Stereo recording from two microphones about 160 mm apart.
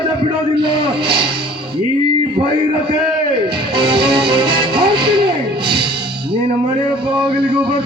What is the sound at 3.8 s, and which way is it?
Music, 30° right (ahead or behind).